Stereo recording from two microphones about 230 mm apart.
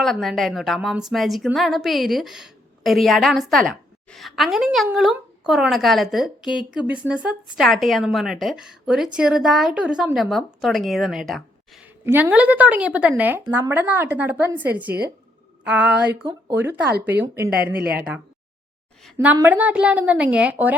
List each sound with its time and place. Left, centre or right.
0.0 s a woman's voice: centre
17.7 s speech: right
19.1 s speech: centre